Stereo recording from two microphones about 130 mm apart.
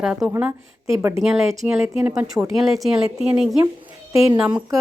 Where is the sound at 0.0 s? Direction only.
5° right (ahead or behind).